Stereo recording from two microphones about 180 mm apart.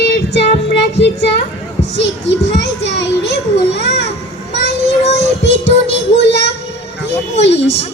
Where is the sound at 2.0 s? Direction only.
75° left (ahead or behind).